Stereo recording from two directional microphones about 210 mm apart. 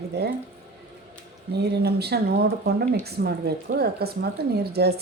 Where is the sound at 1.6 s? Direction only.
50° right (ahead or behind).